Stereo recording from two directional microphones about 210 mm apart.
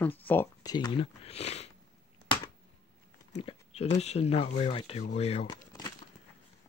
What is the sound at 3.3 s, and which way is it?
Speech, 30° left (ahead or behind).